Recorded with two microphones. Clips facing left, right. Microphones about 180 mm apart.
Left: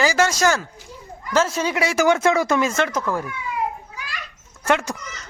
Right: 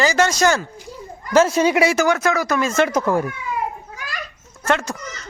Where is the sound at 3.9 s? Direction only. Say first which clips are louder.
Right 2 dB; 45° right (ahead or behind).